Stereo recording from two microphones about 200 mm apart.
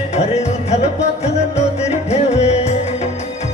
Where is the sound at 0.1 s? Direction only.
35° left (ahead or behind).